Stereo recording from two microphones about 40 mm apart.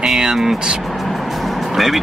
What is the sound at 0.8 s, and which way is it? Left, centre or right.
Vehicle, centre.